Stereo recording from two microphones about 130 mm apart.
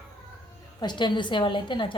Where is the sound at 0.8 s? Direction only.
35° left (ahead or behind).